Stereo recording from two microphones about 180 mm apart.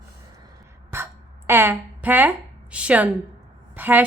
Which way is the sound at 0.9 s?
15° right (ahead or behind).